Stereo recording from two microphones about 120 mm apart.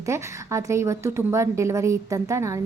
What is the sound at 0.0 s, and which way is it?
A woman's voice, 25° right (ahead or behind).